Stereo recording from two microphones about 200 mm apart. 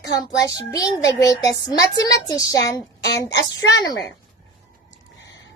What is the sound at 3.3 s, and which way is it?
Speech, 60° left (ahead or behind).